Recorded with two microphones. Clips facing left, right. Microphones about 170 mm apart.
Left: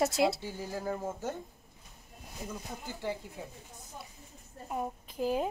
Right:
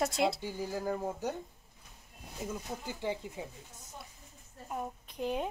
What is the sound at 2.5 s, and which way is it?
Speech, 10° right (ahead or behind).